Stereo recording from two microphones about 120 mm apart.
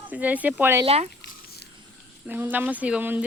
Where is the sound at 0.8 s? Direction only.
60° right (ahead or behind).